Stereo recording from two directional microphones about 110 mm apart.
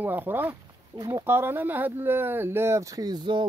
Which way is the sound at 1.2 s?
20° right (ahead or behind).